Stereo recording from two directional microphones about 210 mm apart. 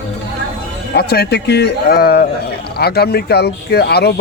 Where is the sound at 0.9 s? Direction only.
50° left (ahead or behind).